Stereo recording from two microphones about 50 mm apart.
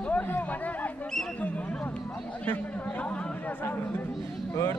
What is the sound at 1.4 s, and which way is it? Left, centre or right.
Hubbub, left.